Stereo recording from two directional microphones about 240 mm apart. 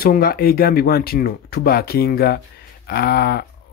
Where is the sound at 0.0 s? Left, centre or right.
Left.